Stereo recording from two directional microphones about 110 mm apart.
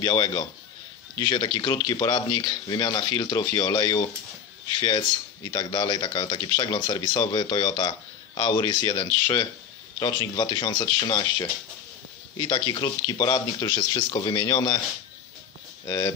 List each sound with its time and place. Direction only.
0.0 s speech: 40° left (ahead or behind)
15.8 s speech: 35° left (ahead or behind)